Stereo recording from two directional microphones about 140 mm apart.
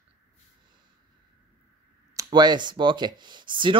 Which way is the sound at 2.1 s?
30° right (ahead or behind).